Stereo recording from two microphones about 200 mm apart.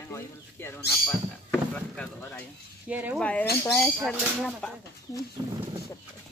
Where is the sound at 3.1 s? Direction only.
5° left (ahead or behind).